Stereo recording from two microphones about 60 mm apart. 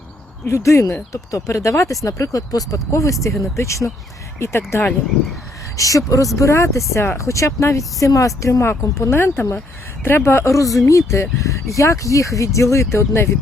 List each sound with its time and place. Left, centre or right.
0.4 s speech: left
2.9 s speech: left
5.7 s speech: left
8.8 s speech: left